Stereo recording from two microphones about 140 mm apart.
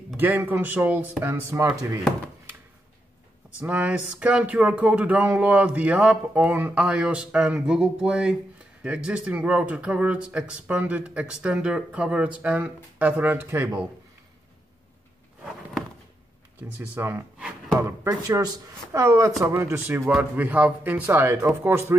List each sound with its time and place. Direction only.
0.2 s speech: 15° right (ahead or behind)
3.6 s speech: 10° right (ahead or behind)
16.7 s speech: 15° right (ahead or behind)